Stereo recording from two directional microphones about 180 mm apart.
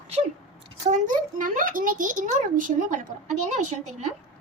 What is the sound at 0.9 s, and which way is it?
A woman's voice, 45° right (ahead or behind).